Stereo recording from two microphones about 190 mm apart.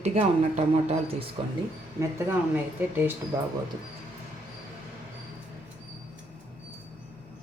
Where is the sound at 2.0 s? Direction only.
15° right (ahead or behind).